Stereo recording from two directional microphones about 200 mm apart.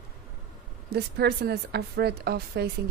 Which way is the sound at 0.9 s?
55° right (ahead or behind).